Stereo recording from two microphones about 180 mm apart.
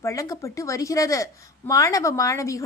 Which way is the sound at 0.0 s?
20° left (ahead or behind).